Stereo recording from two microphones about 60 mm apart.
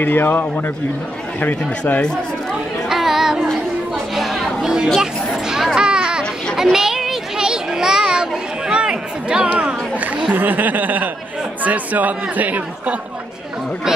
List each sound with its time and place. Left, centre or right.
0.0 s a man's voice: left
2.9 s music: centre
4.1 s chatter: centre
5.0 s a sound: centre
9.5 s a sound: right
10.3 s speech: right